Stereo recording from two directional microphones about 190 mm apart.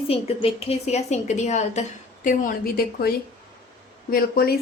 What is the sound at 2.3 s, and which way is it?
A woman's voice, 50° left (ahead or behind).